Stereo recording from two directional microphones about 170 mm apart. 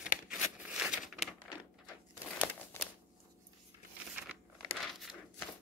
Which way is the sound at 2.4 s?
10° left (ahead or behind).